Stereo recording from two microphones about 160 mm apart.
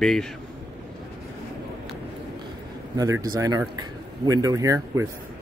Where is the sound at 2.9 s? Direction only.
20° right (ahead or behind).